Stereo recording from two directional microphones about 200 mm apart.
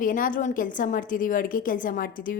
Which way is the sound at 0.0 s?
45° left (ahead or behind).